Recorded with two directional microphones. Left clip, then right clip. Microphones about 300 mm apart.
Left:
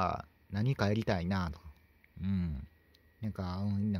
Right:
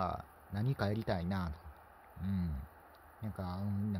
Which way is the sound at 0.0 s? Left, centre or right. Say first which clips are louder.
Left 4 dB; centre.